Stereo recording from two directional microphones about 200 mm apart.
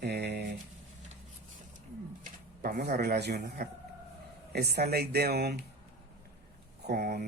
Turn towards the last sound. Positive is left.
turn(degrees=-50)  # may be behind; listen again after turning